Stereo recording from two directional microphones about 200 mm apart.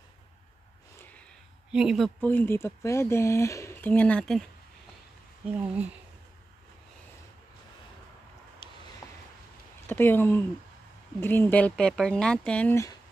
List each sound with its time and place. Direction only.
1.7 s speech: 5° right (ahead or behind)
8.6 s a sound: 20° left (ahead or behind)
9.8 s speech: 10° left (ahead or behind)